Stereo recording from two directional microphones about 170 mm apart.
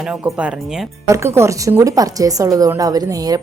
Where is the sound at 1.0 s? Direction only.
15° right (ahead or behind).